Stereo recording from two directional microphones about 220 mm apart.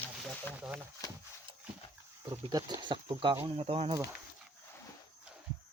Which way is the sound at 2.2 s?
15° right (ahead or behind).